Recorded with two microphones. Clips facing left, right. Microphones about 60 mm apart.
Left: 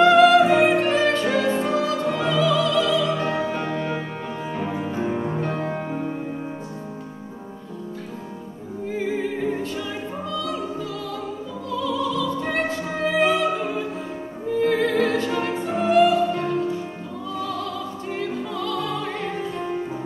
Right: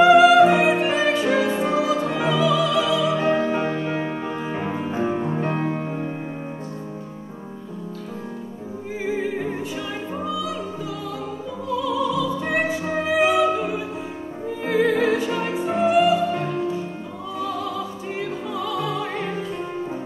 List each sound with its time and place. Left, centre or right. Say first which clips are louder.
0.0 s music: right 2 dB; centre
4.3 s music: right 1 dB; right
5.1 s music: right 1 dB; centre
5.4 s music: right 2 dB; right
9.6 s opera: even; centre
17.3 s opera: right 1 dB; centre